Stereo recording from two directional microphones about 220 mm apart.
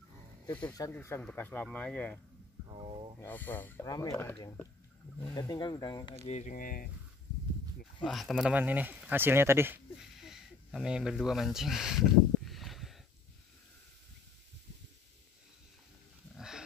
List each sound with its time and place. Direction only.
0.5 s speech: 10° left (ahead or behind)
2.8 s a sound: 25° right (ahead or behind)
3.2 s speech: 10° left (ahead or behind)
6.2 s speech: 30° left (ahead or behind)
8.0 s speech: centre (ahead or behind)
12.4 s a sound: centre (ahead or behind)
16.3 s roaring cats: centre (ahead or behind)